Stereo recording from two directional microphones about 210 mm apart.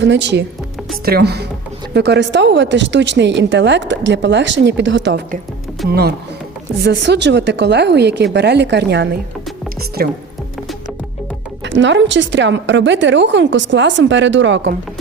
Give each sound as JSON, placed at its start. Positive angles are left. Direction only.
{"t": 0.0, "sound": "a woman's voice", "side_deg": -55}
{"t": 11.6, "sound": "a woman's voice", "side_deg": -60}